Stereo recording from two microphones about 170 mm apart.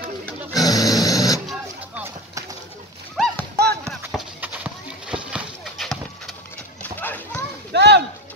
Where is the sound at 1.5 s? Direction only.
10° right (ahead or behind).